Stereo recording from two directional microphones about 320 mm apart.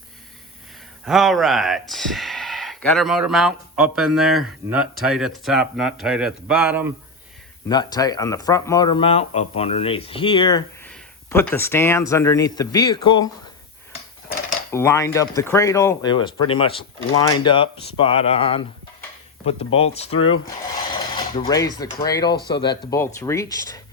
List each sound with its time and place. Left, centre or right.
1.0 s speech: centre
7.7 s speech: centre
14.7 s speech: centre
21.3 s speech: centre